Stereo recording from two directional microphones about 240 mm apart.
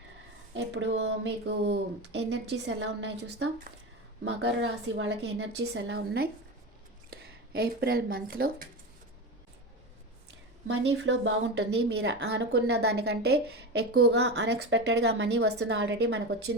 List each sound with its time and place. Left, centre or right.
0.5 s speech: right
10.7 s speech: right